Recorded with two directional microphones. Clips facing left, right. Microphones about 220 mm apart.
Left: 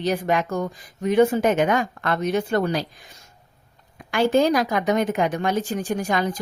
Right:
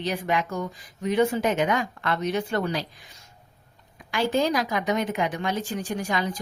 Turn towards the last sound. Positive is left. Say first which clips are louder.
# left 4 dB
turn(degrees=50)  # may be behind; listen again after turning